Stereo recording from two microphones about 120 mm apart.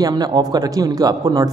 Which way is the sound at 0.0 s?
35° right (ahead or behind).